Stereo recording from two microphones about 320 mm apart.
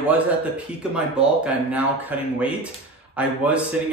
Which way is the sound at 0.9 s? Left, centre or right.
Centre.